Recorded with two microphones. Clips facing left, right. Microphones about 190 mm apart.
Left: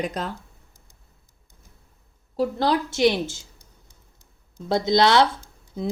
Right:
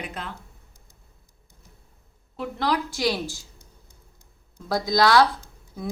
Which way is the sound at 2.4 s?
30° left (ahead or behind).